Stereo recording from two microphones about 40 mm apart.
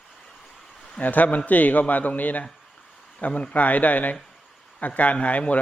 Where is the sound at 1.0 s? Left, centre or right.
Left.